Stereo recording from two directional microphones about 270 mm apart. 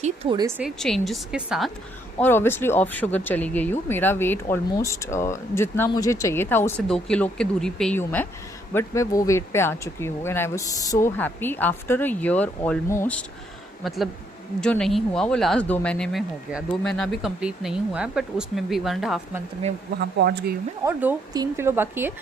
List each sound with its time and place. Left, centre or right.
0.0 s speech: centre
20.0 s speech: right
20.8 s a woman's voice: centre